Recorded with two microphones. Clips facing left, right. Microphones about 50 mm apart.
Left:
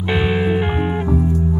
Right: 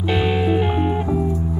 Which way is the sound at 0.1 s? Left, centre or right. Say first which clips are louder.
Left 1 dB; centre.